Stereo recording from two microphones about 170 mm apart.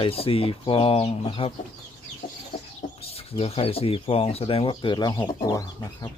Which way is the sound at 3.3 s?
35° left (ahead or behind).